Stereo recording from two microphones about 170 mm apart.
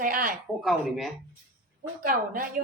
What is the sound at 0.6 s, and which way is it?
Speech, centre (ahead or behind).